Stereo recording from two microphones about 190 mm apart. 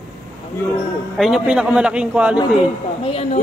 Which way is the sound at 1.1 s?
Centre (ahead or behind).